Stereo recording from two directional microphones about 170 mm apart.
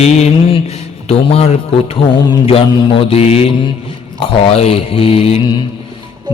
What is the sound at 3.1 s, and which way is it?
Mantra, 35° left (ahead or behind).